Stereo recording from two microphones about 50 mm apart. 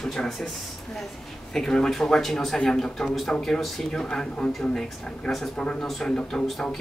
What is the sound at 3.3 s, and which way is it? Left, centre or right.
Speech, left.